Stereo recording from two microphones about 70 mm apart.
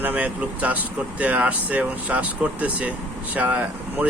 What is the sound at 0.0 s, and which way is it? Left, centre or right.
Speech, right.